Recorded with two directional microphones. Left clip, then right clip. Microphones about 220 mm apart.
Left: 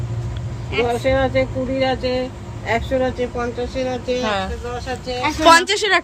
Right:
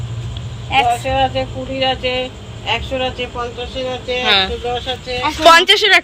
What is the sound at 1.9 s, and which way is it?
Speech, 50° left (ahead or behind).